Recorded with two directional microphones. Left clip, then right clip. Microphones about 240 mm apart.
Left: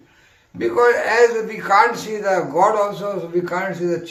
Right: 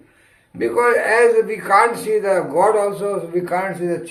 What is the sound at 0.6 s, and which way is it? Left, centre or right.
Speech, centre.